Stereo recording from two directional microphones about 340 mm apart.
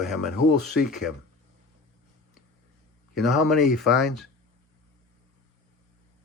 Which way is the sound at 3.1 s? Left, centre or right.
Centre.